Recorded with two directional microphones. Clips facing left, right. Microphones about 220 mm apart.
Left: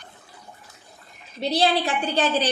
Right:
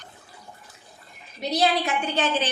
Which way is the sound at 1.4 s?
30° left (ahead or behind).